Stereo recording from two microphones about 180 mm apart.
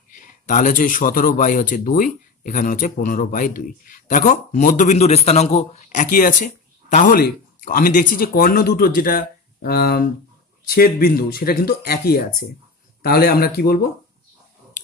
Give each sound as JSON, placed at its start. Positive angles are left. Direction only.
{"t": 0.1, "sound": "speech", "side_deg": 45}